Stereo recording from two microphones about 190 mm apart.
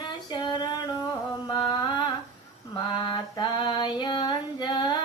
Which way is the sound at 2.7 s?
25° left (ahead or behind).